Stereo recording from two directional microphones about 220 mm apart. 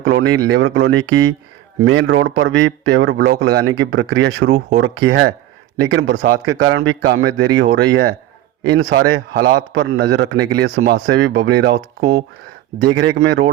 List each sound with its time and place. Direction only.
0.0 s speech: 65° right (ahead or behind)
0.3 s a man's voice: 50° right (ahead or behind)
12.8 s a man's voice: 50° right (ahead or behind)